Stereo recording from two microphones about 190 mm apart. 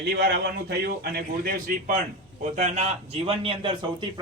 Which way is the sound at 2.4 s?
40° right (ahead or behind).